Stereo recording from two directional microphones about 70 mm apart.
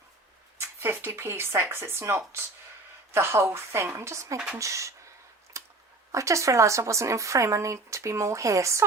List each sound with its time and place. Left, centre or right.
0.8 s speech: right
5.5 s a sound: right
6.1 s speech: right